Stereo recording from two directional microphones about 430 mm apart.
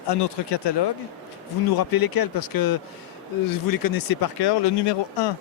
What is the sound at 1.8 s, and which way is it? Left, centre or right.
Speech, left.